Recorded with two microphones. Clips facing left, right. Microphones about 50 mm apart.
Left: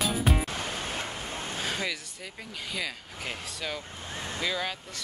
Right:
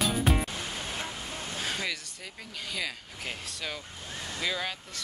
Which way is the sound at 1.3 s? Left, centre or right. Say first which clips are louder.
Left 2 dB; left.